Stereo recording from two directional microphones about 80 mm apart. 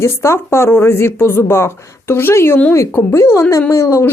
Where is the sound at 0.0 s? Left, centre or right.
Left.